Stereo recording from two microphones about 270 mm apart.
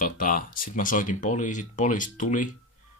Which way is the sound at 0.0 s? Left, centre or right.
Left.